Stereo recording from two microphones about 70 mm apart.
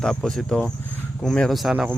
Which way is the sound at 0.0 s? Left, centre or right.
Centre.